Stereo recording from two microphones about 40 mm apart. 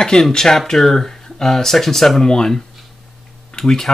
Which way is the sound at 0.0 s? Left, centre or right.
Centre.